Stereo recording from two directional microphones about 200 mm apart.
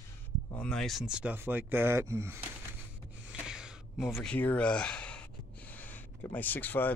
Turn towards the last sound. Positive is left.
turn(degrees=10)  # may be behind; listen again after turning